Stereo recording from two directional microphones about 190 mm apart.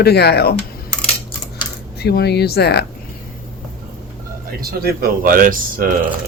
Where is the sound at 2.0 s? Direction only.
60° left (ahead or behind).